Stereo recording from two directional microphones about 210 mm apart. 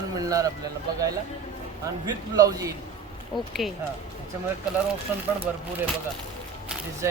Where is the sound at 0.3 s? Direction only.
15° right (ahead or behind).